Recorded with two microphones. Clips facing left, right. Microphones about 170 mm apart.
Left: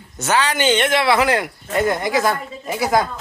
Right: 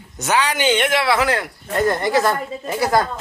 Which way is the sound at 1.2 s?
10° left (ahead or behind).